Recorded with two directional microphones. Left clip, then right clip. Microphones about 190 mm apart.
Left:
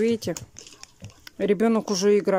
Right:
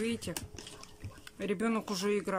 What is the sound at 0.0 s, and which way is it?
Speech, 35° left (ahead or behind).